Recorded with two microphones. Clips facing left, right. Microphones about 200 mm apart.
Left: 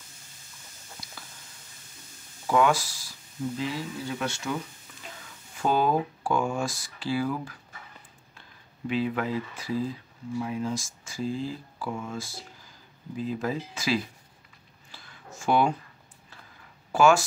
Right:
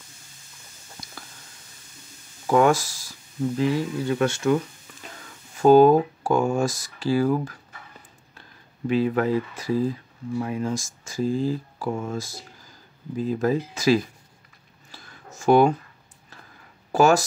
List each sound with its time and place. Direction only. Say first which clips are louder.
2.4 s speech: right 4 dB; 45° right (ahead or behind)
5.6 s speech: right 11 dB; 45° right (ahead or behind)
14.9 s a sound: right 2 dB; 40° right (ahead or behind)
16.9 s speech: right 2 dB; 40° right (ahead or behind)